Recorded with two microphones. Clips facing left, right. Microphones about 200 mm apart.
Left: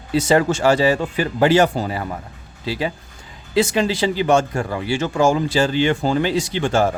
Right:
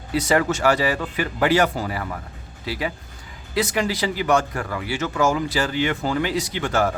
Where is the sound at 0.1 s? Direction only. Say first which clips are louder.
Left 4 dB; 25° left (ahead or behind).